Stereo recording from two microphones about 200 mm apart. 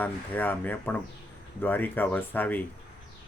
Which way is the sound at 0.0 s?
10° left (ahead or behind).